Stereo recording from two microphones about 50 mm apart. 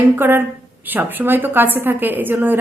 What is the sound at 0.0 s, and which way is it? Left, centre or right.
A woman's voice, right.